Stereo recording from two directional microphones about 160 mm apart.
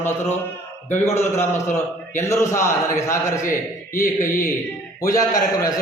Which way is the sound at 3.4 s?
60° left (ahead or behind).